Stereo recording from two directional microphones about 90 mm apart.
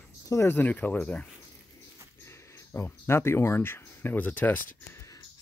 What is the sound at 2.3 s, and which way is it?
Speech, 25° left (ahead or behind).